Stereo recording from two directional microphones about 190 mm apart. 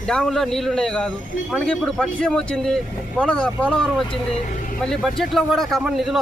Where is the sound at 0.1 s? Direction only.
Centre (ahead or behind).